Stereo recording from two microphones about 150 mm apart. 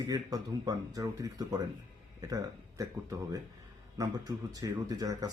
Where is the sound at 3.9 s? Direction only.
25° right (ahead or behind).